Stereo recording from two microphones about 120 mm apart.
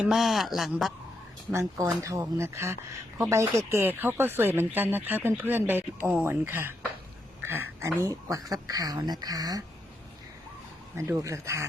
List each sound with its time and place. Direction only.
0.0 s speech: centre (ahead or behind)
1.5 s speech: 25° right (ahead or behind)
10.9 s speech: 20° right (ahead or behind)